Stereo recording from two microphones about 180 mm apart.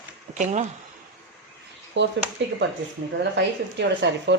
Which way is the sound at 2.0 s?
85° right.